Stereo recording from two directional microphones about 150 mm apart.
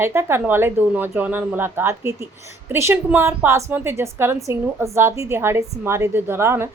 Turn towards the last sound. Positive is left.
turn(degrees=-15)  # may be behind; listen again after turning